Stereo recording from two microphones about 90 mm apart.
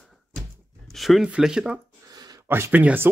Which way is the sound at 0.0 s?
5° left (ahead or behind).